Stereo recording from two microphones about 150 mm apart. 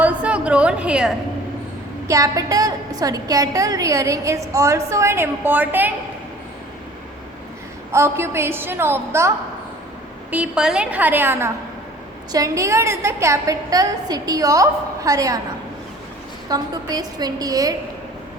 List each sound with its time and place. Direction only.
0.0 s a sound: 10° right (ahead or behind)
2.0 s a woman's voice: 25° right (ahead or behind)
7.9 s a woman's voice: 15° right (ahead or behind)
10.3 s a woman's voice: 5° right (ahead or behind); by 15.4 s 25° right (ahead or behind)
16.5 s a woman's voice: 25° right (ahead or behind)